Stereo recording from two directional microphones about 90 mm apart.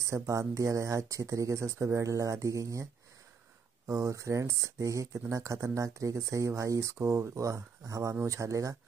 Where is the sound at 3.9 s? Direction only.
35° right (ahead or behind).